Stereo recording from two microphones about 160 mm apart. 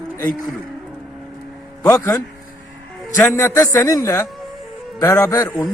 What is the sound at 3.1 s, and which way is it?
A man's voice, 15° left (ahead or behind).